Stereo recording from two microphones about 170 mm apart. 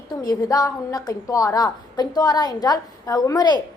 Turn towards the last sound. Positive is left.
turn(degrees=25)  # may be behind; listen again after turning